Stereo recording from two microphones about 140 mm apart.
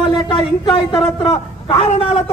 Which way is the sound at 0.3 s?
40° left (ahead or behind).